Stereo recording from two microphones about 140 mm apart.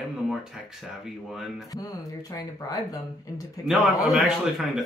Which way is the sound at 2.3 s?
25° left (ahead or behind).